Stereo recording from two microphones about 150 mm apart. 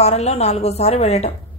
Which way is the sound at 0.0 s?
45° left (ahead or behind).